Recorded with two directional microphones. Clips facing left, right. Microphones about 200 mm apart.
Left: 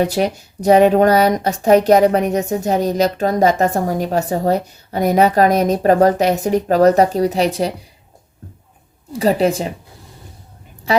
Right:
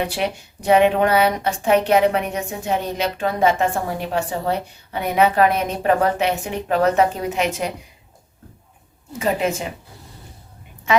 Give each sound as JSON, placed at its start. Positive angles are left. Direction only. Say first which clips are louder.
{"t": 0.0, "sound": "speech", "louder": "left 6 dB", "side_deg": 40}
{"t": 9.1, "sound": "speech", "louder": "left 6 dB", "side_deg": 35}
{"t": 10.9, "sound": "a woman's voice", "louder": "left 2 dB", "side_deg": 35}